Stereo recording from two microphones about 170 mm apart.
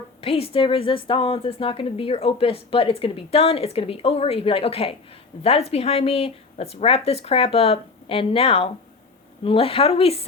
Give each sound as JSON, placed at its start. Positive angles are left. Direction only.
{"t": 0.2, "sound": "a woman's voice", "side_deg": 35}